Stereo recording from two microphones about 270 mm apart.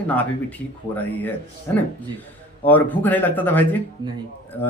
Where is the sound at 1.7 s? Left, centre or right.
Centre.